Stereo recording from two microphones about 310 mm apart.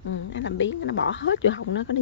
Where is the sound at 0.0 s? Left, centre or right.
Left.